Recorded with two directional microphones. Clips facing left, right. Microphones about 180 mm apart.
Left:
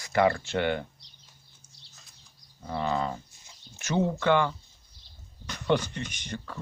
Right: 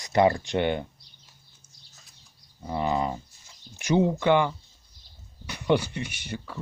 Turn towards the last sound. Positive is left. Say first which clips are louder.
# right 1 dB
turn(degrees=-5)  # may be behind; listen again after turning